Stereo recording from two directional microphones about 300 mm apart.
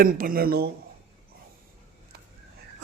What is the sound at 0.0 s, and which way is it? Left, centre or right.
Speech, right.